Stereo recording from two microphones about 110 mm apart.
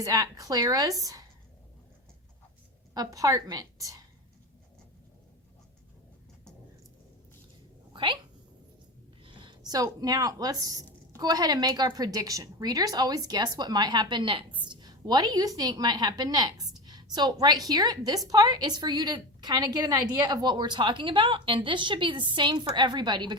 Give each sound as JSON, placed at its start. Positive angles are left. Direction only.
{"t": 0.0, "sound": "a woman's voice", "side_deg": -30}
{"t": 2.9, "sound": "a woman's voice", "side_deg": -35}
{"t": 7.9, "sound": "speech", "side_deg": -50}
{"t": 9.2, "sound": "a woman's voice", "side_deg": -45}